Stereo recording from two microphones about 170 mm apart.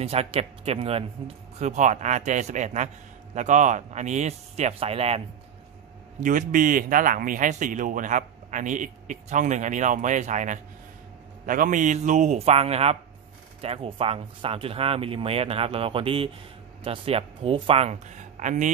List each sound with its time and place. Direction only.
0.0 s a man's voice: 35° right (ahead or behind)
6.2 s a man's voice: 50° right (ahead or behind)